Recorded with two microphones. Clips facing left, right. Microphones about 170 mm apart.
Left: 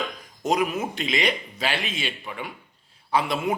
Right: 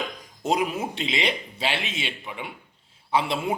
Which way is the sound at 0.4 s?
30° right (ahead or behind).